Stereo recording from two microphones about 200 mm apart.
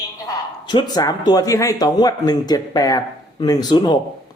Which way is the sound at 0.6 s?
20° left (ahead or behind).